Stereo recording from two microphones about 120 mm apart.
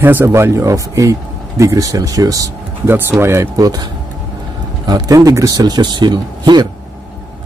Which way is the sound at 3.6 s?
35° right (ahead or behind).